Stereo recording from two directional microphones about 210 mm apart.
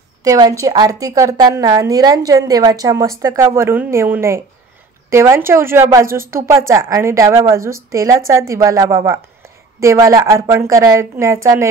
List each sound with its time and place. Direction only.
0.2 s a woman's voice: 15° right (ahead or behind)